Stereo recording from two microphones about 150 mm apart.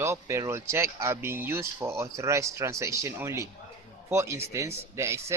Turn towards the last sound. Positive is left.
turn(degrees=-20)  # may be behind; listen again after turning